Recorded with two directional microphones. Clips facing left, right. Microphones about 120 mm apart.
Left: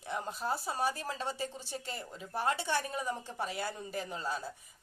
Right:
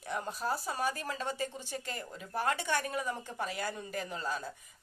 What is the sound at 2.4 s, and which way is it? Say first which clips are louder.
Speech: even; 25° left (ahead or behind).